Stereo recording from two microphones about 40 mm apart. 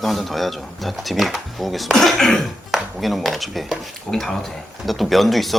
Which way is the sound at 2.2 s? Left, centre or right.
Centre.